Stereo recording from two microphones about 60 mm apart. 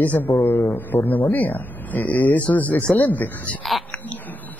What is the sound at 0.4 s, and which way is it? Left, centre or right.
A man's voice, left.